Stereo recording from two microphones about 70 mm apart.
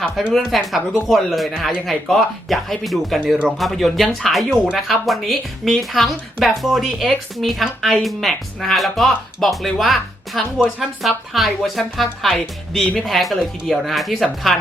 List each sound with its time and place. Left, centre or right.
0.3 s speech: centre